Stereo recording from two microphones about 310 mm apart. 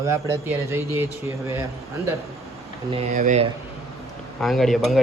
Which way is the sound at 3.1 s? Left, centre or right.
Right.